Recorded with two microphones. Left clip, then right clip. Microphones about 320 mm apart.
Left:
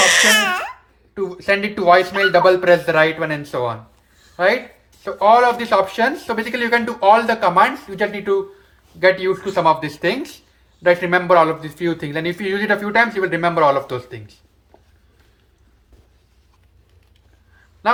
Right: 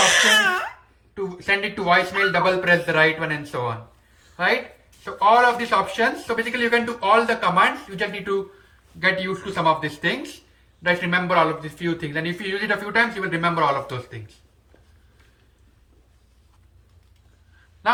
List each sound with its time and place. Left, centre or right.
0.1 s crying: left
1.1 s speech: centre
5.0 s speech: centre